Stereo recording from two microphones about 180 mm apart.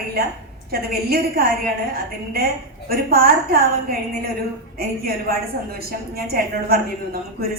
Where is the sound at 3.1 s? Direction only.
55° right (ahead or behind).